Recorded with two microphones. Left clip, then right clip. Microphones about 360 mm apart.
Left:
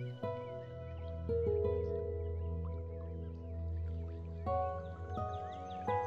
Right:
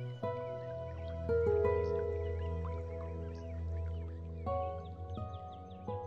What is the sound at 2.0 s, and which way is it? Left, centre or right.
Music, right.